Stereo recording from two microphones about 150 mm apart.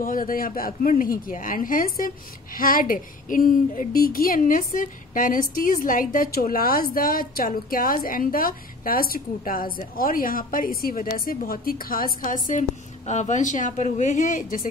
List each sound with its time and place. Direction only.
0.0 s a woman's voice: 65° left (ahead or behind)
12.4 s a woman's voice: 55° left (ahead or behind)